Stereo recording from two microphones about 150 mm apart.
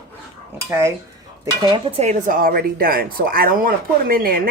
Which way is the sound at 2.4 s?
75° right (ahead or behind).